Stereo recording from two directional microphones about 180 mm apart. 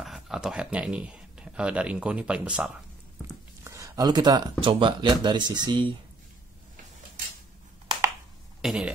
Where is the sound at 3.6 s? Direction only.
15° right (ahead or behind).